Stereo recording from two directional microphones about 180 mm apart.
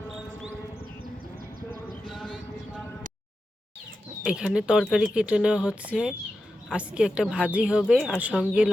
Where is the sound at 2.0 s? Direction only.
Centre (ahead or behind).